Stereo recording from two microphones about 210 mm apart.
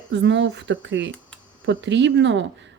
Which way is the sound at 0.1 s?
60° right (ahead or behind).